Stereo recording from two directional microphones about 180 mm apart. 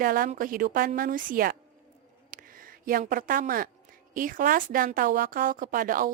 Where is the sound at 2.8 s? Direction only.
50° right (ahead or behind).